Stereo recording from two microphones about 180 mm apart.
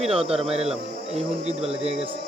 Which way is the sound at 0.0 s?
35° right (ahead or behind).